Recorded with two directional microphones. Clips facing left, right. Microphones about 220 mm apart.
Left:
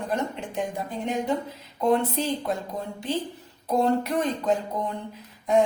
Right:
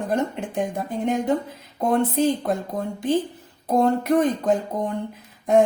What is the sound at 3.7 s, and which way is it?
Speech, 50° right (ahead or behind).